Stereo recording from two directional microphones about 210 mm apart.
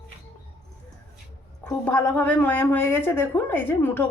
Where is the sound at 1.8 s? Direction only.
10° left (ahead or behind).